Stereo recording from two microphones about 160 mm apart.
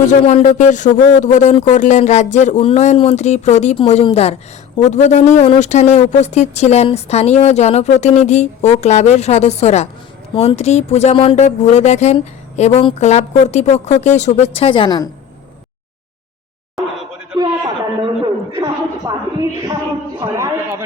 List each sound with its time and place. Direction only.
0.0 s speech: 50° left (ahead or behind); by 15.1 s 25° left (ahead or behind)
18.5 s a sound: 20° right (ahead or behind)
20.1 s a man's voice: 20° right (ahead or behind)